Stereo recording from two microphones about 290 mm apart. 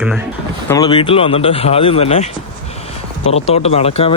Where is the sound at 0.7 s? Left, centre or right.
Centre.